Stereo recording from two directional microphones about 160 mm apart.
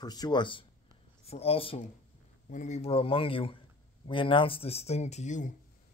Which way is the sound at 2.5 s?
50° left (ahead or behind).